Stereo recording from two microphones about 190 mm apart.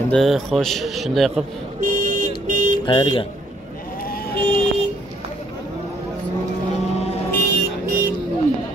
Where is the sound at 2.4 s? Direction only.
40° right (ahead or behind).